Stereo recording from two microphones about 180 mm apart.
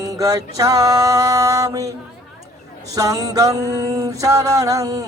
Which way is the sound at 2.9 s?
20° right (ahead or behind).